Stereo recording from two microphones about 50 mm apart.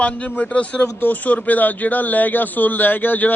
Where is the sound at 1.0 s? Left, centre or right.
Left.